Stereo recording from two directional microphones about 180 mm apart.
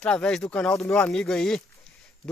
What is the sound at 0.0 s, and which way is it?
Speech, 5° left (ahead or behind).